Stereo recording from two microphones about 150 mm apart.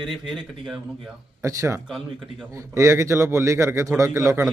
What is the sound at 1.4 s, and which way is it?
A man's voice, 20° right (ahead or behind).